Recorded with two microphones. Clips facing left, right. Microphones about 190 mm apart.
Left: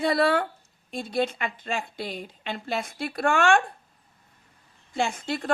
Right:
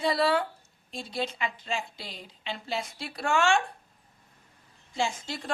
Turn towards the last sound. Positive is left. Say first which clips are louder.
# left 4 dB
turn(degrees=60)  # may be behind; listen again after turning